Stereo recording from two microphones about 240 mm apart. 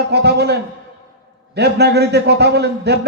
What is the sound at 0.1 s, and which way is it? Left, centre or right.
A man's voice, right.